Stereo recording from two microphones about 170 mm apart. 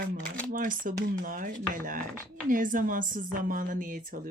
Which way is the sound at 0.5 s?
55° right (ahead or behind).